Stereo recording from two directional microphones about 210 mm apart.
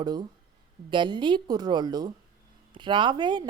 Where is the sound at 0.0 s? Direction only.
20° right (ahead or behind).